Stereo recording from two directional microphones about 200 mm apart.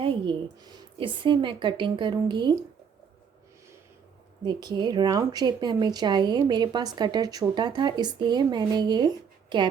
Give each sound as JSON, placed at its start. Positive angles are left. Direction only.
{"t": 0.0, "sound": "a woman's voice", "side_deg": -25}
{"t": 4.4, "sound": "speech", "side_deg": -20}